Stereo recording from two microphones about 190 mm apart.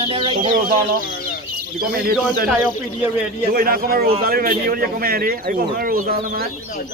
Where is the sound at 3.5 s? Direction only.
50° right (ahead or behind).